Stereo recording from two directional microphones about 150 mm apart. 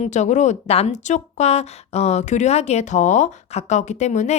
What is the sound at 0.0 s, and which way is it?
A woman's voice, 50° left (ahead or behind).